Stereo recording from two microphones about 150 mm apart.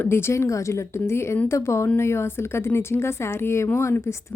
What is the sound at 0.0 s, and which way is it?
A woman's voice, 15° left (ahead or behind).